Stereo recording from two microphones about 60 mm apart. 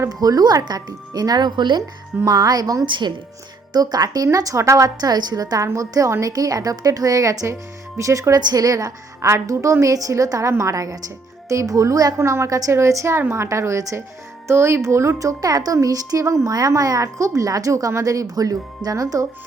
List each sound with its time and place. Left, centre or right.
0.1 s a woman's voice: right
4.9 s speech: right
5.6 s a woman's voice: right
6.2 s a woman's voice: right
7.9 s a woman's voice: right
9.2 s a woman's voice: right
9.8 s a woman's voice: right
12.1 s a woman's voice: right
16.2 s a woman's voice: right
16.5 s a woman's voice: right